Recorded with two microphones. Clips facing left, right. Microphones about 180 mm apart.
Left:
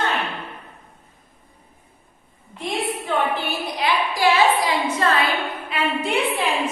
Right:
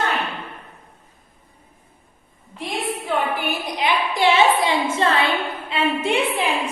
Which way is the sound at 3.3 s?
20° right (ahead or behind).